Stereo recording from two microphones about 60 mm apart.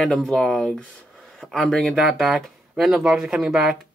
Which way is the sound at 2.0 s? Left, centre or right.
Centre.